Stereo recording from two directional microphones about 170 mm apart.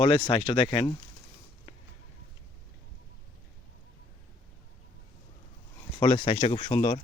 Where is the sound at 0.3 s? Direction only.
35° left (ahead or behind).